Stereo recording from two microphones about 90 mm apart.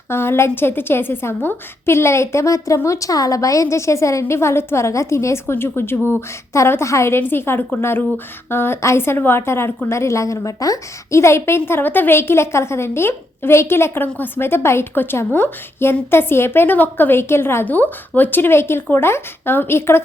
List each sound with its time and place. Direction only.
0.1 s a woman's voice: 25° left (ahead or behind)